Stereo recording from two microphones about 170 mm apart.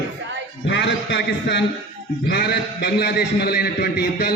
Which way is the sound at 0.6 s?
90° left.